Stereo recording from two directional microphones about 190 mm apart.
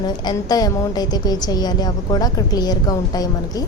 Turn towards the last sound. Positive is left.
turn(degrees=20)  # may be behind; listen again after turning